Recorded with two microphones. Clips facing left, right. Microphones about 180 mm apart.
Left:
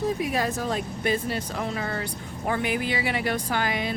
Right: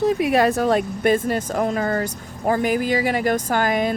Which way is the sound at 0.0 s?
70° right (ahead or behind).